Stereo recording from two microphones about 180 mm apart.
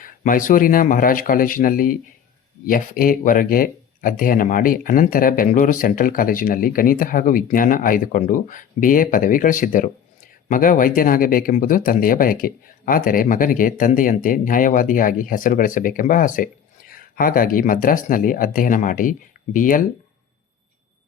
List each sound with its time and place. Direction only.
0.0 s speech: 50° left (ahead or behind)